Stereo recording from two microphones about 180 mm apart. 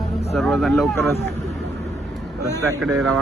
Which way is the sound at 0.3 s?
Centre (ahead or behind).